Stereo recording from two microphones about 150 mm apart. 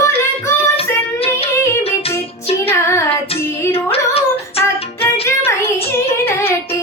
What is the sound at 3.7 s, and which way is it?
Female singing, 40° left (ahead or behind).